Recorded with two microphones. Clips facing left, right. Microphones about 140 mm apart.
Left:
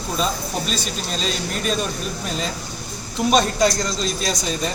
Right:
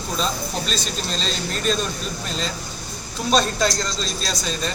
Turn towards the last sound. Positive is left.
turn(degrees=15)  # may be behind; listen again after turning